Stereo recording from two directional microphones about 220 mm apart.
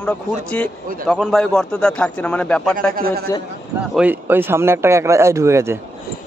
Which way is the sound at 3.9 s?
10° right (ahead or behind).